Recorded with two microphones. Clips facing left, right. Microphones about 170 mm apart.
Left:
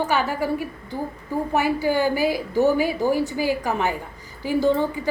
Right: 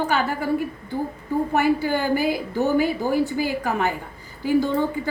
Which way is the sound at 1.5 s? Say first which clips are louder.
Left 1 dB; 50° right (ahead or behind).